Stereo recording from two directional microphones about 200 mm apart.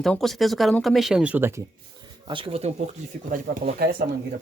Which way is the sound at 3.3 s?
40° right (ahead or behind).